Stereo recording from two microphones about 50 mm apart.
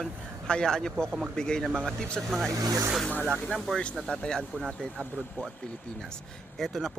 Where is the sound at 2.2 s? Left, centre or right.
Centre.